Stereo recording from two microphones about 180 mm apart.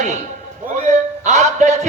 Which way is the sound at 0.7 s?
40° right (ahead or behind).